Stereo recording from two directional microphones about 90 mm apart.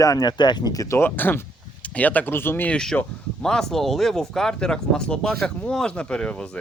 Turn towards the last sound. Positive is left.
turn(degrees=10)  # may be behind; listen again after turning